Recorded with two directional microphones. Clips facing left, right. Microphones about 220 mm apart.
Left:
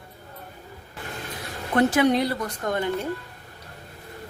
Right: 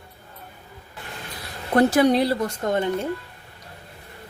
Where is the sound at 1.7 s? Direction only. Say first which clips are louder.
Right 3 dB; 35° right (ahead or behind).